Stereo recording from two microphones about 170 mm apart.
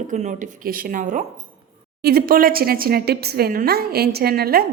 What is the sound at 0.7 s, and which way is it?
Speech, 55° right (ahead or behind).